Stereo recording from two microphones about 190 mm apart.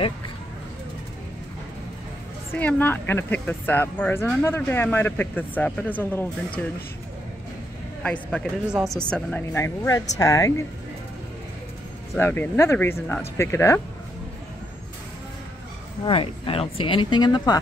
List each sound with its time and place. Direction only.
2.5 s speech: 10° left (ahead or behind)
8.0 s speech: 5° left (ahead or behind)
9.1 s speech: 10° left (ahead or behind)
12.2 s speech: 10° left (ahead or behind)
16.1 s speech: 30° left (ahead or behind)